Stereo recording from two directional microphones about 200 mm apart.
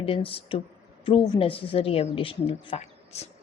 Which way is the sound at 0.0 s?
25° left (ahead or behind).